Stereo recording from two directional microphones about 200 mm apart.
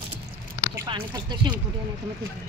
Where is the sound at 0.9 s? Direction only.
25° right (ahead or behind).